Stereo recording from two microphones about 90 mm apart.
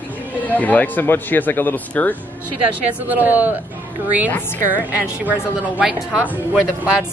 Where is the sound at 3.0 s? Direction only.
15° right (ahead or behind).